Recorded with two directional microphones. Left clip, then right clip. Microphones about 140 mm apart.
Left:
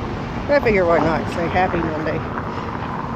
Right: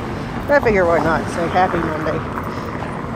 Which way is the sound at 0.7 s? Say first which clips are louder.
Right 1 dB; 15° left (ahead or behind).